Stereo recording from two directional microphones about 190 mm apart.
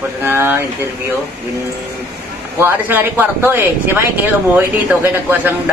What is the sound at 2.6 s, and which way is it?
Speech, 10° right (ahead or behind).